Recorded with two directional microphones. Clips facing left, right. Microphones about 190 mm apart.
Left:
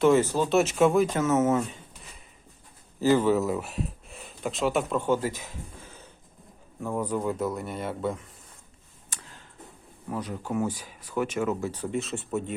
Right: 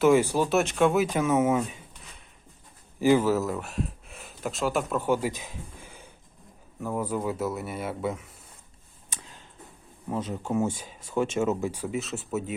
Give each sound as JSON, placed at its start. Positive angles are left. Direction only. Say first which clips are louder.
{"t": 0.0, "sound": "speech", "louder": "even", "side_deg": -10}
{"t": 0.5, "sound": "speech", "louder": "left 3 dB", "side_deg": 5}
{"t": 3.0, "sound": "speech", "louder": "even", "side_deg": -10}
{"t": 9.0, "sound": "tick", "louder": "right 1 dB", "side_deg": -20}
{"t": 10.1, "sound": "speech", "louder": "right 2 dB", "side_deg": -25}
{"t": 11.7, "sound": "speech", "louder": "left 1 dB", "side_deg": -5}